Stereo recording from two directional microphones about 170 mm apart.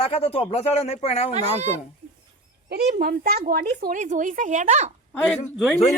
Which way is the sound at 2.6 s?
65° right (ahead or behind).